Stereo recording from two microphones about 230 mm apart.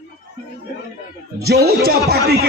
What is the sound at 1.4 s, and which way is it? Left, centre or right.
Speech, right.